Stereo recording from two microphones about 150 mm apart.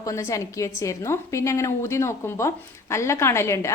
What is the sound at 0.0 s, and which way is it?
A woman's voice, 20° left (ahead or behind).